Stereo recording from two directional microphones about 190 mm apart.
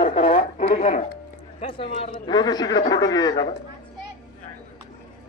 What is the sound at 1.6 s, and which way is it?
Speech, 30° left (ahead or behind).